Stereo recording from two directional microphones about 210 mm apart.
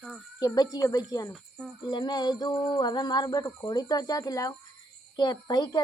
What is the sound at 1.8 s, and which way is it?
A woman's voice, 20° left (ahead or behind).